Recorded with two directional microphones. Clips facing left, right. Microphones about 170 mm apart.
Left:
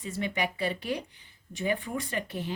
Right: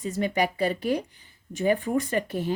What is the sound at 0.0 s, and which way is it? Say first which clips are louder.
A woman's voice: right 6 dB; 40° right (ahead or behind).